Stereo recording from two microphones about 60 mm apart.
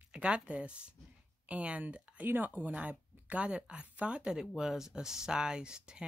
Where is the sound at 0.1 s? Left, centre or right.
Centre.